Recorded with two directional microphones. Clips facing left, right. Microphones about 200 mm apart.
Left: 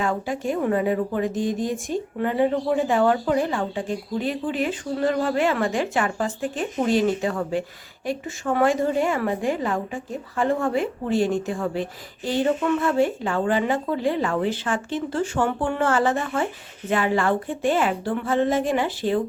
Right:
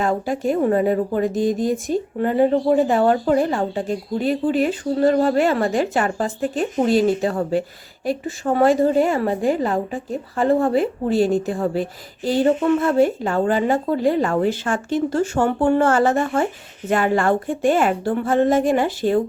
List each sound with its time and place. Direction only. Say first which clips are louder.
0.0 s a woman's voice: right 4 dB; 40° right (ahead or behind)